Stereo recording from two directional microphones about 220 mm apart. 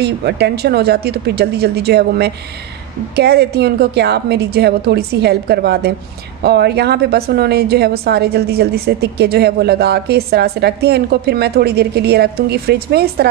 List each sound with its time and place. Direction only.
0.0 s a woman's voice: 50° right (ahead or behind)